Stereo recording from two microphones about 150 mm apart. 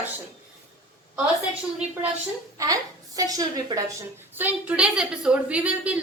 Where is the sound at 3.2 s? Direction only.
25° right (ahead or behind).